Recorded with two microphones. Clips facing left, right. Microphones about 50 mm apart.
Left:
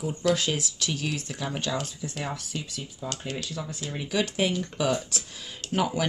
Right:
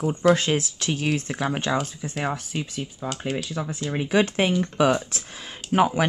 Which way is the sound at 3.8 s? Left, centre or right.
Right.